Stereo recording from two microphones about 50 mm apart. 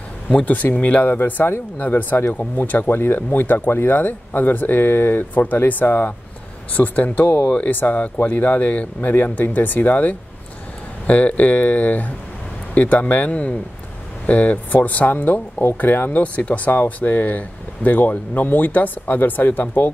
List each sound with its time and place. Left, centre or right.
0.7 s speech: left